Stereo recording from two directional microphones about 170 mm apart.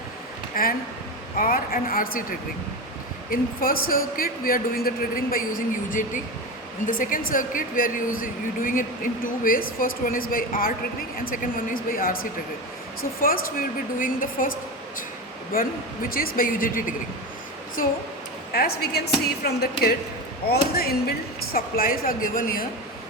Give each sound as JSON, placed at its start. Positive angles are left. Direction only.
{"t": 0.6, "sound": "a man's voice", "side_deg": 60}
{"t": 3.2, "sound": "a man's voice", "side_deg": 60}
{"t": 6.8, "sound": "a man's voice", "side_deg": 50}
{"t": 16.0, "sound": "a man's voice", "side_deg": 60}
{"t": 18.5, "sound": "a woman's voice", "side_deg": 65}